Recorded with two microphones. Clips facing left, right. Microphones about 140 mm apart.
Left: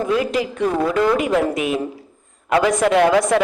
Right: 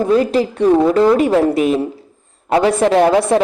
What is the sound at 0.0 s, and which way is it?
A woman's voice, 35° right (ahead or behind).